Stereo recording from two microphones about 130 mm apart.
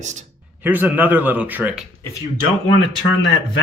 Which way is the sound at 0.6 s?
15° right (ahead or behind).